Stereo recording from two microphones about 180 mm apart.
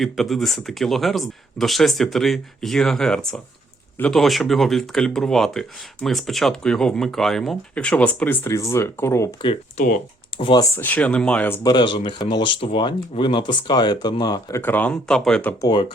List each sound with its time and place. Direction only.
0.0 s speech: centre (ahead or behind)
9.4 s speech: 30° left (ahead or behind)
10.8 s speech: 10° left (ahead or behind)
15.6 s speech: 25° left (ahead or behind)